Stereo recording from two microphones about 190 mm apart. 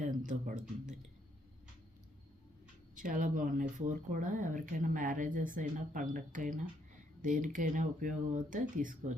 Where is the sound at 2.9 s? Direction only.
45° right (ahead or behind).